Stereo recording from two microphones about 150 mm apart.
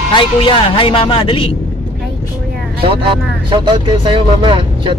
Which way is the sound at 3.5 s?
35° right (ahead or behind).